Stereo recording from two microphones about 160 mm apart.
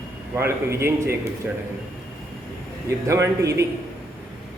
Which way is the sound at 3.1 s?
20° right (ahead or behind).